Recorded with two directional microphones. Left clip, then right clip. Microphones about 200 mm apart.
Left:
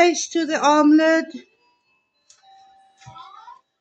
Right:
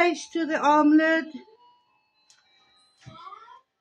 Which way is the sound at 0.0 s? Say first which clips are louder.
Left 6 dB; 40° left (ahead or behind).